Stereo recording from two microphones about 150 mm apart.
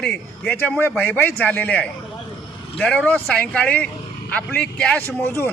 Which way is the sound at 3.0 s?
10° left (ahead or behind).